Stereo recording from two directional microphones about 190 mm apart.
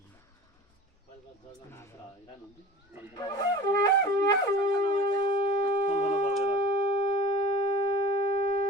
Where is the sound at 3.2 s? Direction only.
20° left (ahead or behind).